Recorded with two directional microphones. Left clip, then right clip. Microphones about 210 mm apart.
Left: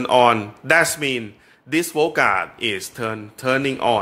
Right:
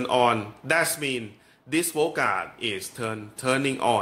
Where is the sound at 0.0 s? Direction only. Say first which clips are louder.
Left 7 dB; 20° left (ahead or behind).